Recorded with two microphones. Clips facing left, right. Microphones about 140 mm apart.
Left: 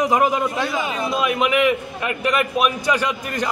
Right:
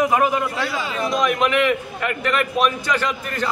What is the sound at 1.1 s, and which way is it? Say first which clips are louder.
A man's voice: right 1 dB; 10° left (ahead or behind).